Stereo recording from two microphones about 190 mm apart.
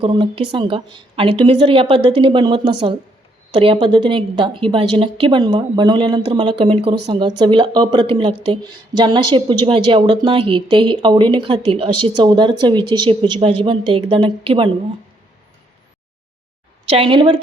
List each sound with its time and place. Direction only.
0.0 s speech: 25° right (ahead or behind)
16.8 s speech: 30° right (ahead or behind)